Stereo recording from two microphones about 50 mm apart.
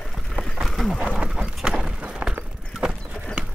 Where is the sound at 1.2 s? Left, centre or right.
Centre.